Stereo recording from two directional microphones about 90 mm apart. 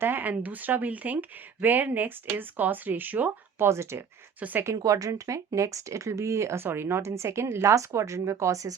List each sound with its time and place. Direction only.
0.0 s speech: 20° right (ahead or behind)
3.7 s speech: 30° right (ahead or behind)
4.4 s speech: 20° right (ahead or behind)
4.6 s speech: 35° right (ahead or behind)